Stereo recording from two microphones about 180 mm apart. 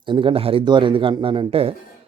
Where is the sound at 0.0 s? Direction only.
25° right (ahead or behind).